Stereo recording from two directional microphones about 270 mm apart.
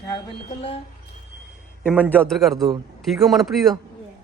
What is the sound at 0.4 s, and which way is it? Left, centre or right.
Speech, left.